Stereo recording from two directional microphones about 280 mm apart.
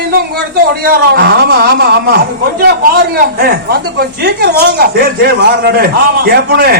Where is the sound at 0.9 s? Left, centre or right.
Right.